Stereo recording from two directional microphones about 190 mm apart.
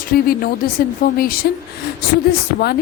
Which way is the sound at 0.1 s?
50° left (ahead or behind).